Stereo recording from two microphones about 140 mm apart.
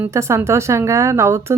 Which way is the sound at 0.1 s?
20° right (ahead or behind).